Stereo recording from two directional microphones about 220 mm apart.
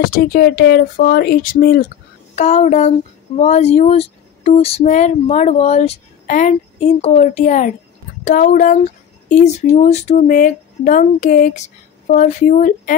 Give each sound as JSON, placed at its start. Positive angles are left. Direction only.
{"t": 0.1, "sound": "speech", "side_deg": 45}
{"t": 2.3, "sound": "speech", "side_deg": 30}